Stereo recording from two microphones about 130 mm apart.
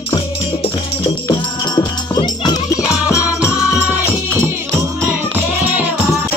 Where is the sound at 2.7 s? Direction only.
5° right (ahead or behind).